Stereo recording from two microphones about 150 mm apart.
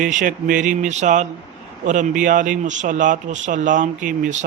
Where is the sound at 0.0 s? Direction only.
60° right (ahead or behind).